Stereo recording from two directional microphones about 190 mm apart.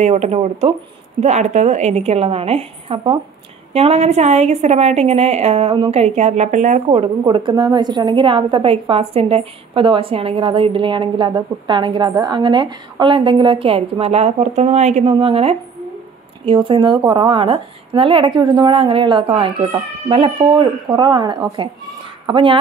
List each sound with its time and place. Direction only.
0.0 s a woman's voice: 35° right (ahead or behind)
6.9 s a woman's voice: 25° right (ahead or behind)